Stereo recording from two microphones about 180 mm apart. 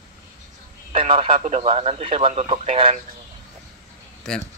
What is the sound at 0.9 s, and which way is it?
Speech, 30° right (ahead or behind).